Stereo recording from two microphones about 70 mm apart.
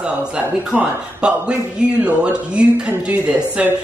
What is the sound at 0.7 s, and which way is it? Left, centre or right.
A man's voice, centre.